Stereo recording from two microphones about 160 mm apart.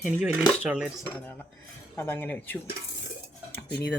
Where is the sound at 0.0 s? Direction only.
5° right (ahead or behind).